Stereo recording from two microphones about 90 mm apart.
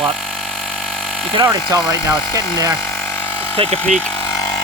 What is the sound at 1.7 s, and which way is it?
Speech, 45° right (ahead or behind).